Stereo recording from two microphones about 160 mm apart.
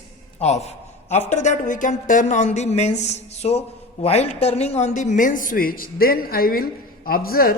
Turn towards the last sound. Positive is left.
turn(degrees=65)  # may be behind; listen again after turning